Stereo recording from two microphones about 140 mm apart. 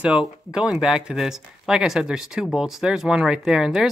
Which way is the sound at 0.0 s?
5° right (ahead or behind).